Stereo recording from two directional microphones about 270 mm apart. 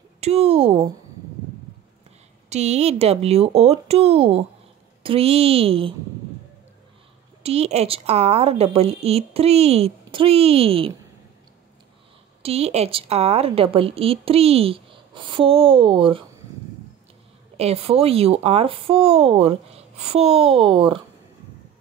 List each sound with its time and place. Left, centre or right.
0.2 s a woman's voice: right
2.5 s a woman's voice: right
7.4 s a woman's voice: right
12.4 s a woman's voice: right
17.6 s a woman's voice: right